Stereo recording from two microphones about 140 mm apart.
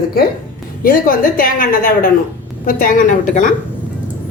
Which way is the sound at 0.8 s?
85° left.